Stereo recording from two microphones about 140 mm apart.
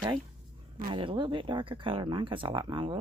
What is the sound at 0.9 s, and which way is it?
Speech, 35° right (ahead or behind).